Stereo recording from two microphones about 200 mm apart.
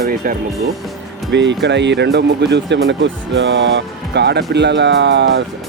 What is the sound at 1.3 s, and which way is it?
Speech, 60° right (ahead or behind).